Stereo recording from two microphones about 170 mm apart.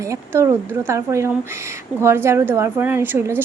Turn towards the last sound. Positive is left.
turn(degrees=-10)  # may be behind; listen again after turning